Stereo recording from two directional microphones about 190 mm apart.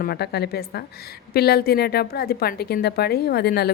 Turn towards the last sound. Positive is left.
turn(degrees=55)  # may be behind; listen again after turning